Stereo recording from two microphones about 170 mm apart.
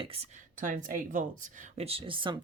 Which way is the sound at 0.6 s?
50° right (ahead or behind).